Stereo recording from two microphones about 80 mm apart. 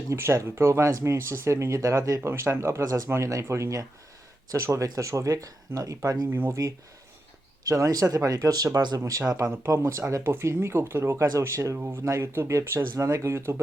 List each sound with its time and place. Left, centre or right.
0.1 s speech: right
2.8 s speech: right
6.3 s speech: right
7.6 s speech: right
9.0 s speech: right